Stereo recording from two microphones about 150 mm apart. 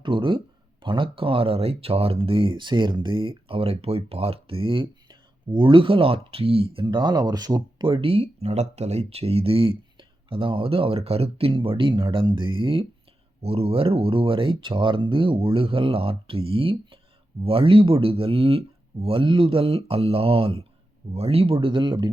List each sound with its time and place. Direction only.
0.0 s speech: 35° right (ahead or behind)